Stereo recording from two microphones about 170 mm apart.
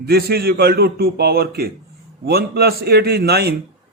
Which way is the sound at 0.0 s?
65° right (ahead or behind).